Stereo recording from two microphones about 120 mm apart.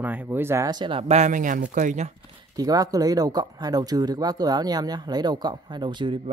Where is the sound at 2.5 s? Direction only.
30° right (ahead or behind).